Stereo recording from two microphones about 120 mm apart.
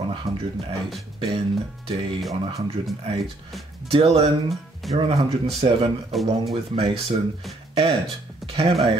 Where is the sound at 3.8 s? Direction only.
55° right (ahead or behind).